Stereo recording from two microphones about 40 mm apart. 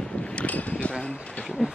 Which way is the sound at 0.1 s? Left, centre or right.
Left.